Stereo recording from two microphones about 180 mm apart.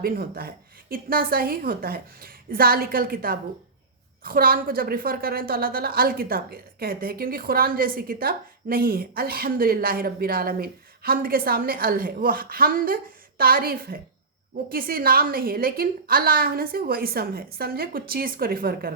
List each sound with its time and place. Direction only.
0.0 s a woman's voice: 55° right (ahead or behind)